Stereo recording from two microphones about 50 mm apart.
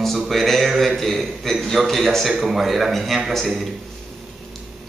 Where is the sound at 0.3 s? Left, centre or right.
Centre.